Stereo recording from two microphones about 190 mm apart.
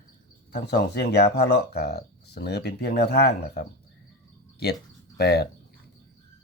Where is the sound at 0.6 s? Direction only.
60° left (ahead or behind).